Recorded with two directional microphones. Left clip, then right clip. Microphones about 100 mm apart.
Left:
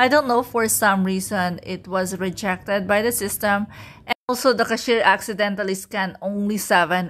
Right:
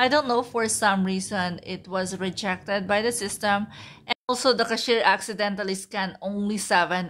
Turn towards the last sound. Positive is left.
turn(degrees=45)  # may be behind; listen again after turning